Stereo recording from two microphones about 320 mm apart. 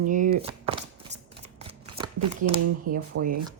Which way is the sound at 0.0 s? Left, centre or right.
Right.